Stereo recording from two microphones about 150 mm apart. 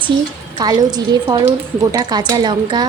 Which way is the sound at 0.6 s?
25° right (ahead or behind).